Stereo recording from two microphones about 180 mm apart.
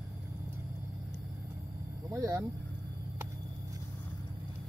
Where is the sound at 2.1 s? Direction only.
20° right (ahead or behind).